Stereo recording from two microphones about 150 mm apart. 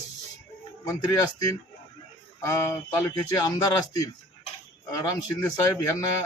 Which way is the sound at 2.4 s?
20° left (ahead or behind).